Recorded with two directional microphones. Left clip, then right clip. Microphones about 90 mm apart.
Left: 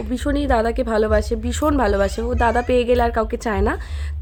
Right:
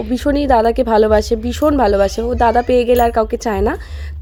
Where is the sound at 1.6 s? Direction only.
25° right (ahead or behind).